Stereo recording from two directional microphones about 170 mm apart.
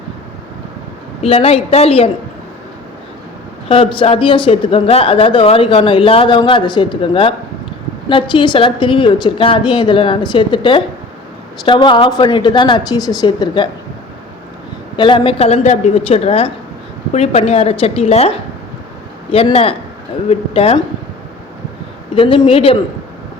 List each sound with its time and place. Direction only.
1.2 s speech: 35° left (ahead or behind)
3.7 s a woman's voice: 30° left (ahead or behind)
14.9 s speech: 30° left (ahead or behind)
22.1 s speech: 30° left (ahead or behind)